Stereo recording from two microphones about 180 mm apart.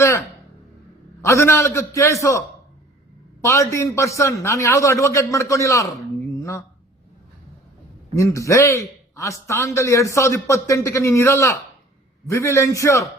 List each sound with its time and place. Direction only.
0.0 s a man's voice: 15° left (ahead or behind)
3.4 s a man's voice: 15° left (ahead or behind)
8.1 s a man's voice: 15° left (ahead or behind)